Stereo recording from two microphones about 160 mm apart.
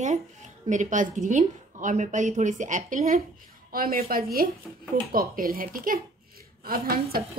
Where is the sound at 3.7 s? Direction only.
65° right (ahead or behind).